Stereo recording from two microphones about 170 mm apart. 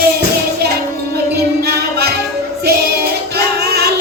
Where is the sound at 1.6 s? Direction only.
70° right (ahead or behind).